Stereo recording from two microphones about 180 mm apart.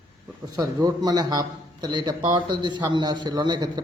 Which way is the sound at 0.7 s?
20° right (ahead or behind).